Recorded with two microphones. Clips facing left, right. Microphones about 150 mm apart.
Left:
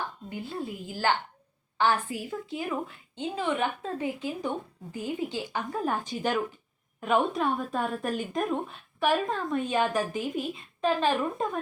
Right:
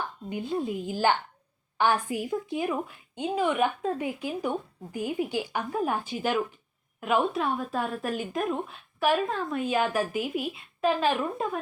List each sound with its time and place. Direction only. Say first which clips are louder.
0.3 s a woman's voice: right 9 dB; 20° right (ahead or behind)